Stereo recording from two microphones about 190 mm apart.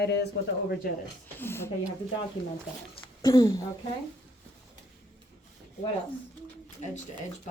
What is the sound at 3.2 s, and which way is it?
Speech, 15° left (ahead or behind).